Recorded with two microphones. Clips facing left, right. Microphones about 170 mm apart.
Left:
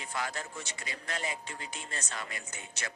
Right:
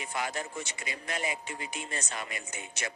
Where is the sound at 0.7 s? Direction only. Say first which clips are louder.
Right 2 dB; 15° right (ahead or behind).